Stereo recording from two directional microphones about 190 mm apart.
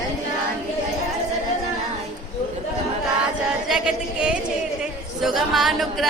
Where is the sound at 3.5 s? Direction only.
5° right (ahead or behind).